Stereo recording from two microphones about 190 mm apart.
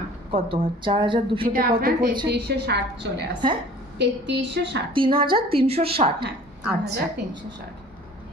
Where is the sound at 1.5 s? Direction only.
50° right (ahead or behind).